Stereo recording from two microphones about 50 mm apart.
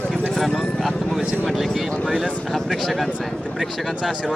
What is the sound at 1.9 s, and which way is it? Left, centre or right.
Speech, centre.